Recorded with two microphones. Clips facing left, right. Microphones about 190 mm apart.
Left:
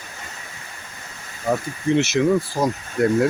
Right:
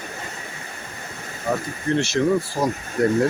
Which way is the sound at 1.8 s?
15° left (ahead or behind).